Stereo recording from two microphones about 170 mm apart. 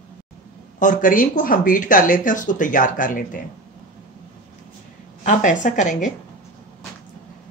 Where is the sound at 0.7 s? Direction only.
50° left (ahead or behind).